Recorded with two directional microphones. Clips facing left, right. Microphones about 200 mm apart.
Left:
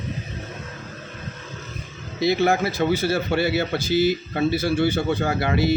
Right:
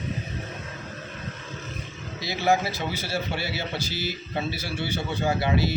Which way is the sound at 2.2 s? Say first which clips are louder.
Left 5 dB; 55° left (ahead or behind).